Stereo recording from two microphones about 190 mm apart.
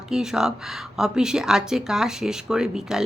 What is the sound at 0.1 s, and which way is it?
A woman's voice, 5° right (ahead or behind).